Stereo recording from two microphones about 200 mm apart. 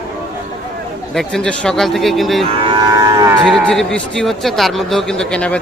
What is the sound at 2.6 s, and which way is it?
Livestock, 20° right (ahead or behind).